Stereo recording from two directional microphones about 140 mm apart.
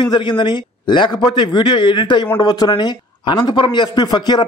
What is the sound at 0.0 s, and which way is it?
A man's voice, 30° left (ahead or behind).